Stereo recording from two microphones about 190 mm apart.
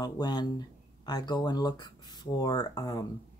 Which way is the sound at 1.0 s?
20° left (ahead or behind).